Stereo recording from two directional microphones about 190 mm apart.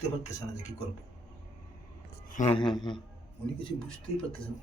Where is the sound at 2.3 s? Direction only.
40° left (ahead or behind).